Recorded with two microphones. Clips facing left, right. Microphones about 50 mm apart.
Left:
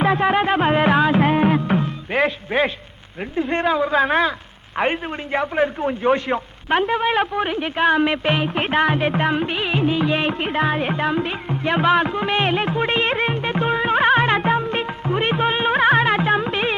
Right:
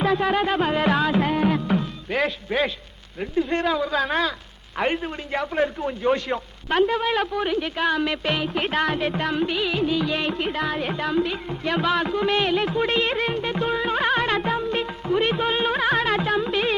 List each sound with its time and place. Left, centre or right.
0.0 s music: left
3.2 s a man's voice: left
12.5 s music: left